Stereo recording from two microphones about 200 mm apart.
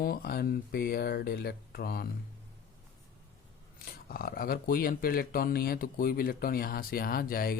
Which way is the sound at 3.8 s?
45° left (ahead or behind).